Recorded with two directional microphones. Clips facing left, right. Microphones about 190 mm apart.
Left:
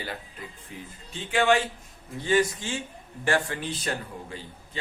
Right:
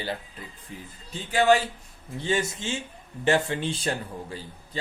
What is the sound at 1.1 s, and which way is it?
Speech, 40° right (ahead or behind).